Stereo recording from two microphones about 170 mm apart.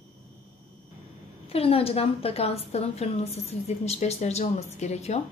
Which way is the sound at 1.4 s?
35° left (ahead or behind).